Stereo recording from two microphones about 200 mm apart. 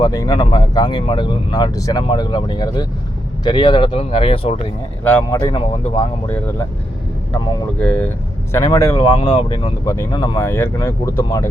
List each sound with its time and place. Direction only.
0.0 s speech: 20° left (ahead or behind)
5.0 s speech: 10° left (ahead or behind)
7.8 s speech: 10° left (ahead or behind)
9.1 s speech: 30° left (ahead or behind)